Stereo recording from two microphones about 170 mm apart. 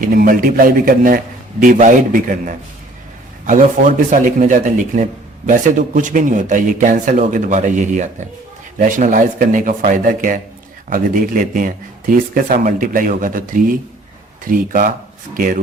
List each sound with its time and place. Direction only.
0.0 s a man's voice: 55° right (ahead or behind)